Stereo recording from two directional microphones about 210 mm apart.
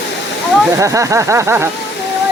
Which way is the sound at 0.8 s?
15° right (ahead or behind).